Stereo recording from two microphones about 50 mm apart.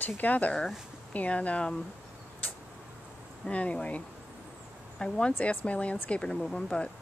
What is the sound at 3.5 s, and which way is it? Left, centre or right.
Speech, left.